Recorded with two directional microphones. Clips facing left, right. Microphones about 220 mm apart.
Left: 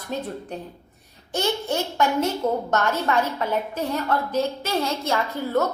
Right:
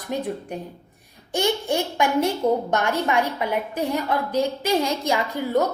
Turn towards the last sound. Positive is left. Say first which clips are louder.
# right 1 dB
turn(degrees=-15)  # may be behind; listen again after turning